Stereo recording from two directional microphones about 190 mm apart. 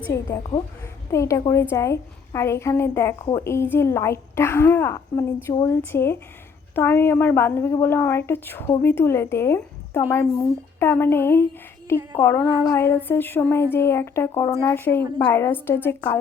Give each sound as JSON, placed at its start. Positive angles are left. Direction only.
{"t": 0.1, "sound": "a woman's voice", "side_deg": 15}